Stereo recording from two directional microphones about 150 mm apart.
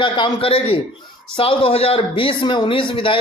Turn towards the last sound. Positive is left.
turn(degrees=35)  # may be behind; listen again after turning